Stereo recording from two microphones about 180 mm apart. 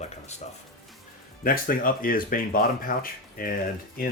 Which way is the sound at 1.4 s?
50° left (ahead or behind).